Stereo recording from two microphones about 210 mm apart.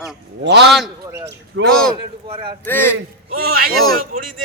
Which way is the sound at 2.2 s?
25° right (ahead or behind).